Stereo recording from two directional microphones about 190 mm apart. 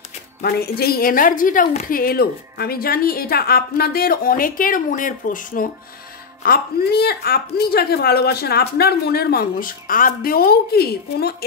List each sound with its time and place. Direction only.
0.4 s a woman's voice: 55° left (ahead or behind)